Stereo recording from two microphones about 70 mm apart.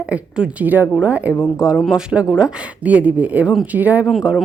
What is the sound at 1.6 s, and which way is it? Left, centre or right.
A woman's voice, centre.